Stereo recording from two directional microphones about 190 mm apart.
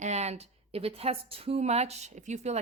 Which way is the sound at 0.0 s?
35° right (ahead or behind).